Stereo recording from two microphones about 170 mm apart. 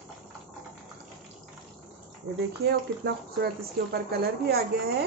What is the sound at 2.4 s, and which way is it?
Speech, 70° right (ahead or behind).